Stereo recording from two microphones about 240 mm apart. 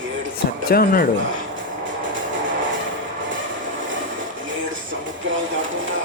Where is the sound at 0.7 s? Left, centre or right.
Left.